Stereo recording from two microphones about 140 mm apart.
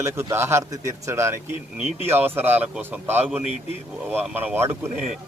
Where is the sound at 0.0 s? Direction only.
20° right (ahead or behind).